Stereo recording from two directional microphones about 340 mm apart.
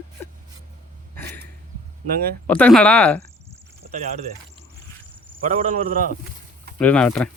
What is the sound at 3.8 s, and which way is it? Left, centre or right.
Speech, centre.